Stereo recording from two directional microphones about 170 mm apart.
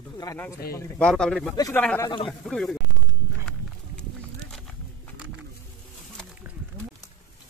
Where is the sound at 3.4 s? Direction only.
5° left (ahead or behind).